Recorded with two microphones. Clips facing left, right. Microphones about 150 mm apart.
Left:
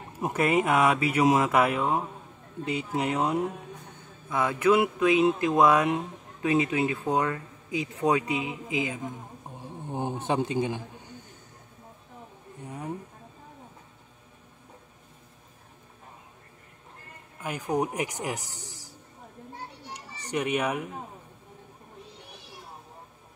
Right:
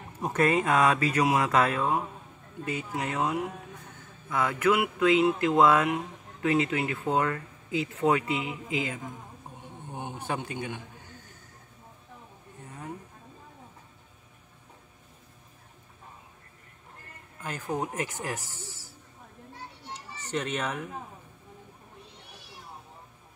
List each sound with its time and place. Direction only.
0.2 s speech: 10° left (ahead or behind)
9.6 s speech: 30° left (ahead or behind)
17.4 s speech: 15° left (ahead or behind)
19.9 s children playing: 15° left (ahead or behind)